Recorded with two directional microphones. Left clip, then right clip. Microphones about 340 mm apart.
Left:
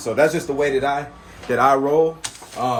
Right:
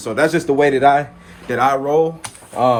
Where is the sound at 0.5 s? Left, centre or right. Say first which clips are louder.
Right 7 dB; right.